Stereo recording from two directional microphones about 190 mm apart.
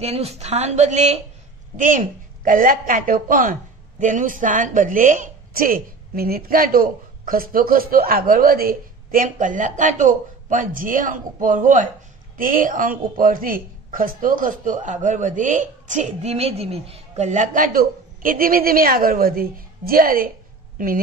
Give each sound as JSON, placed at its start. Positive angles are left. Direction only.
{"t": 0.0, "sound": "a woman's voice", "side_deg": -35}